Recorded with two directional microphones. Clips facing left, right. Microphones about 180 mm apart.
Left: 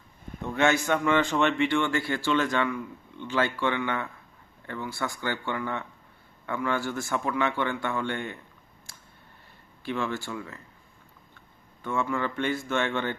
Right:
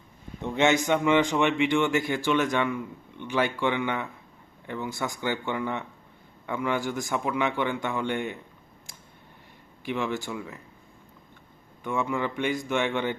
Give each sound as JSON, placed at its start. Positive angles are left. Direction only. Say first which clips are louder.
{"t": 0.4, "sound": "speech", "louder": "right 1 dB", "side_deg": -20}
{"t": 9.8, "sound": "speech", "louder": "right 1 dB", "side_deg": -15}
{"t": 11.8, "sound": "speech", "louder": "right 1 dB", "side_deg": -15}